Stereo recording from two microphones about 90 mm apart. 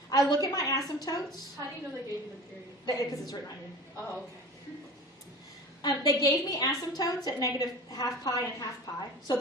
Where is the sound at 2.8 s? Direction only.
45° left (ahead or behind).